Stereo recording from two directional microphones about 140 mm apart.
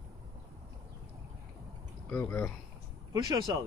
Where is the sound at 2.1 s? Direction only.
15° left (ahead or behind).